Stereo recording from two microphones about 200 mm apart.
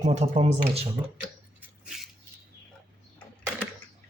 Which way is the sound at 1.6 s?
5° right (ahead or behind).